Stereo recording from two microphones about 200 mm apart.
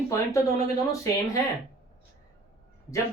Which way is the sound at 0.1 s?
15° left (ahead or behind).